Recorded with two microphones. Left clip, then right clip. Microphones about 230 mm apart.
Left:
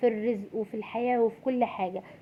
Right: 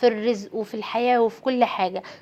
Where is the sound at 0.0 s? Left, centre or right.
Centre.